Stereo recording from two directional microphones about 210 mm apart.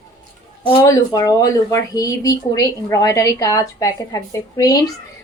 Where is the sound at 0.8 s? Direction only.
15° left (ahead or behind).